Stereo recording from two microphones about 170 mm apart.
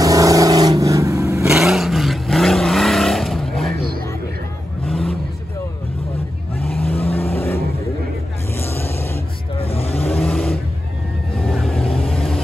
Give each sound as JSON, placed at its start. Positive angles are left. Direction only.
{"t": 0.0, "sound": "vehicle", "side_deg": -20}
{"t": 1.4, "sound": "vehicle", "side_deg": -5}
{"t": 4.8, "sound": "vehicle", "side_deg": 0}
{"t": 7.2, "sound": "vehicle", "side_deg": 15}
{"t": 9.6, "sound": "vehicle", "side_deg": 35}
{"t": 9.9, "sound": "vehicle", "side_deg": 10}
{"t": 11.5, "sound": "vehicle", "side_deg": 0}
{"t": 11.8, "sound": "vehicle", "side_deg": 35}
{"t": 12.1, "sound": "vehicle", "side_deg": 5}